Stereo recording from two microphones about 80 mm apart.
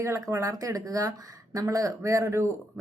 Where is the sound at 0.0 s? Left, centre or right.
Right.